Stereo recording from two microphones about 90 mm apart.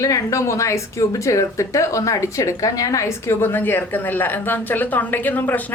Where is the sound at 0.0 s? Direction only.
35° left (ahead or behind).